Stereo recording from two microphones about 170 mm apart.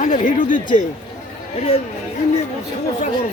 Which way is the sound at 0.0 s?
45° left (ahead or behind).